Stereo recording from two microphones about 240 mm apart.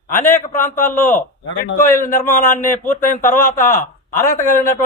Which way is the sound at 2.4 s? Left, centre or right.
Centre.